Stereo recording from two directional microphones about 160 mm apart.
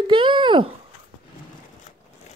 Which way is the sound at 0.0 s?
30° right (ahead or behind).